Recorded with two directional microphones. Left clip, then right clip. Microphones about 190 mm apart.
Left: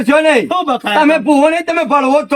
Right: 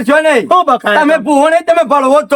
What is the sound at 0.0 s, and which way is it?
Speech, 5° right (ahead or behind).